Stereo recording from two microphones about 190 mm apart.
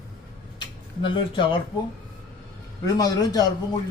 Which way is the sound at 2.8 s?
20° left (ahead or behind).